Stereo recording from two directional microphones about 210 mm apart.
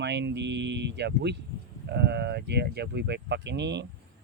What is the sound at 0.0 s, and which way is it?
Speech, 55° right (ahead or behind).